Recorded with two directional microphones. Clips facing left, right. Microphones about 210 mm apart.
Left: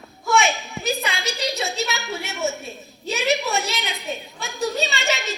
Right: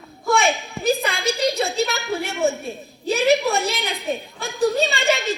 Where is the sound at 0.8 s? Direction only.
55° right (ahead or behind).